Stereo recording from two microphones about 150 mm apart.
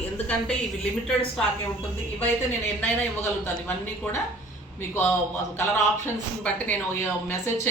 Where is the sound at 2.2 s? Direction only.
10° left (ahead or behind).